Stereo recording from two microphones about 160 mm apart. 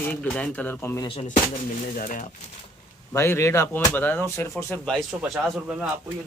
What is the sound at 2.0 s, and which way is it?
Speech, 55° left (ahead or behind).